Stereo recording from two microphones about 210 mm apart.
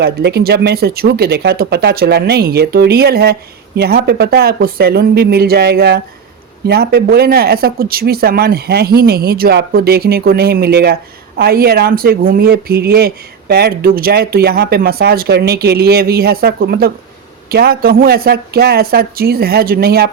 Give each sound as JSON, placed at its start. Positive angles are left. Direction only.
{"t": 0.0, "sound": "speech", "side_deg": -50}